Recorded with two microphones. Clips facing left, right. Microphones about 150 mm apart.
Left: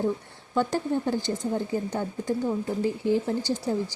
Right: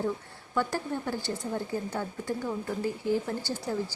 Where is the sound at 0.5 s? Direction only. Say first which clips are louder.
Left 5 dB; 25° left (ahead or behind).